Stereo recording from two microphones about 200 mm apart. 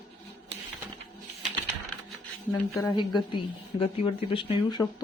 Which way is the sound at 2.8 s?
20° left (ahead or behind).